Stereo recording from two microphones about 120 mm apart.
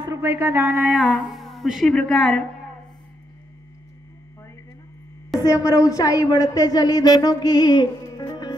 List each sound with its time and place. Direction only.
0.0 s speech: 25° right (ahead or behind)
0.8 s speech: centre (ahead or behind)
5.4 s a woman's voice: 25° left (ahead or behind)